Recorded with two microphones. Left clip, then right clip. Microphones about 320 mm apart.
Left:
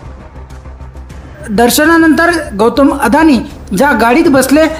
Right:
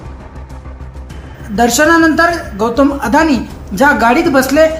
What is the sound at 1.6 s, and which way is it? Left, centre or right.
A woman's voice, left.